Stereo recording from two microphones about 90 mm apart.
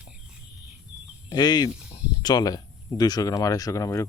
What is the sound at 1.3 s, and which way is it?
Speech, 50° left (ahead or behind).